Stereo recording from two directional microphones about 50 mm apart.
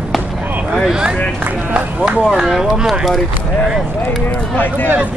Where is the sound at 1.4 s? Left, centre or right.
Right.